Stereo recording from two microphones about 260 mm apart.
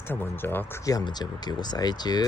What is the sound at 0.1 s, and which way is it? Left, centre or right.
Speech, centre.